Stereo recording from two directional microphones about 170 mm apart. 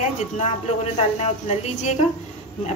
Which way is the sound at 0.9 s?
40° left (ahead or behind).